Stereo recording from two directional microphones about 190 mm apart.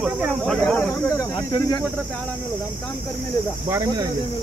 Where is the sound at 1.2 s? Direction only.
20° left (ahead or behind).